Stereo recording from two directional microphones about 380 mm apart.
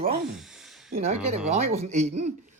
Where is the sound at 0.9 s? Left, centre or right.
Centre.